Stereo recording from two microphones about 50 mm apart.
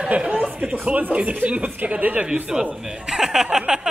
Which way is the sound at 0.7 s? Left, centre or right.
Right.